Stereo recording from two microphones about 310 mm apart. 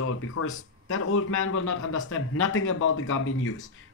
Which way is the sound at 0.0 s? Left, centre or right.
Left.